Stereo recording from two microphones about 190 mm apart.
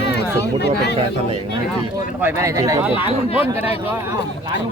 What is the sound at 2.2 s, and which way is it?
Speech, 10° right (ahead or behind).